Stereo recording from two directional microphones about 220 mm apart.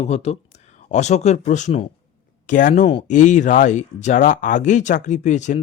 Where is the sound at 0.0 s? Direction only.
30° left (ahead or behind).